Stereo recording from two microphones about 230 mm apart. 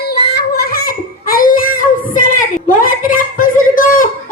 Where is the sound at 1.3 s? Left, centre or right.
Left.